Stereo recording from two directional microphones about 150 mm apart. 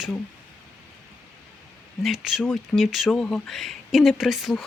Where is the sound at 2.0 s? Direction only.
5° right (ahead or behind).